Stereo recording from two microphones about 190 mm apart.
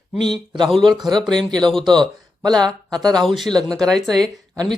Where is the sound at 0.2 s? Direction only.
25° right (ahead or behind).